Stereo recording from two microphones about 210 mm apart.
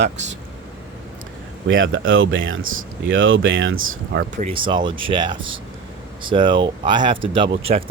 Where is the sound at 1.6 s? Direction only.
65° right (ahead or behind).